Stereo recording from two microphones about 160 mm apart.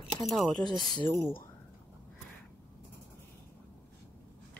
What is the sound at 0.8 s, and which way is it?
Speech, 30° left (ahead or behind).